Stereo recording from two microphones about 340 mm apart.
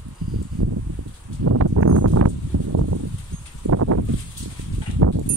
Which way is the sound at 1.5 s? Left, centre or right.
Right.